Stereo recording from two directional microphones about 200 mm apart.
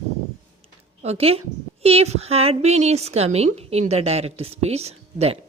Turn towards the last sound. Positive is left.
turn(degrees=-30)  # may be behind; listen again after turning